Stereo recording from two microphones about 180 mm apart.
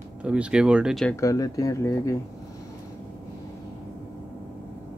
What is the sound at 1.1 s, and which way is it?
Speech, 20° left (ahead or behind).